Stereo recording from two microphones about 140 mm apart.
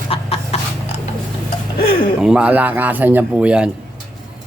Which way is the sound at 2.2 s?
5° right (ahead or behind).